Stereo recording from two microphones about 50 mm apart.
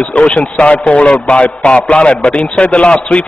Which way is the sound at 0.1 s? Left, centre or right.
Left.